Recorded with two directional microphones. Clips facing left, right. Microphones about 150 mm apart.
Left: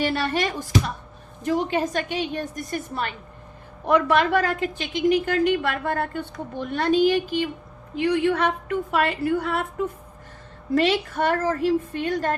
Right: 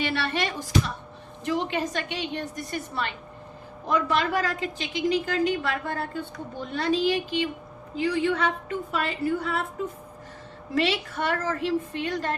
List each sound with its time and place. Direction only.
0.0 s a woman's voice: 45° left (ahead or behind)
3.8 s a woman's voice: 60° left (ahead or behind)
7.9 s a woman's voice: 65° left (ahead or behind)
10.8 s a woman's voice: 45° left (ahead or behind)